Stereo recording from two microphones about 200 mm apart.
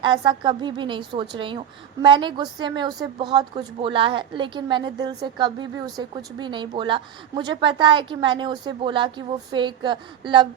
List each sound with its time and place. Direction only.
0.0 s a woman's voice: 25° right (ahead or behind)